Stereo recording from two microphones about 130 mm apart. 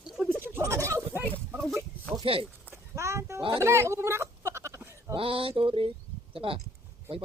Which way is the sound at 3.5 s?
20° right (ahead or behind).